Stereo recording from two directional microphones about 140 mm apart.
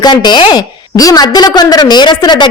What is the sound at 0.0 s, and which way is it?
A woman's voice, 30° left (ahead or behind).